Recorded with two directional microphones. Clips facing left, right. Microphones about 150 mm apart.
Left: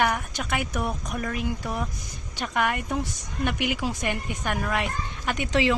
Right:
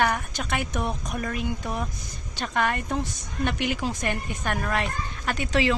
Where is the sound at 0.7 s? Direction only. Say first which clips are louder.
Even; 25° right (ahead or behind).